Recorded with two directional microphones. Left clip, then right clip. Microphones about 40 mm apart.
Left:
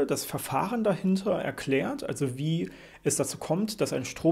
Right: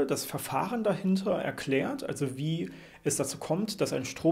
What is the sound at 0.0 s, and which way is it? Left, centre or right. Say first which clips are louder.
Speech: left 1 dB; left.